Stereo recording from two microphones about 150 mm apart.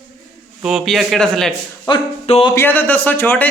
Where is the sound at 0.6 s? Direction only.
Centre (ahead or behind).